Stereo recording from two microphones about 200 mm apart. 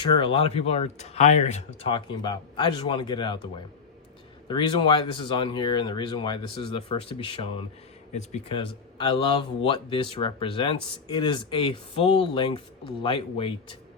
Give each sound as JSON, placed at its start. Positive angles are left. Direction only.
{"t": 0.0, "sound": "speech", "side_deg": 25}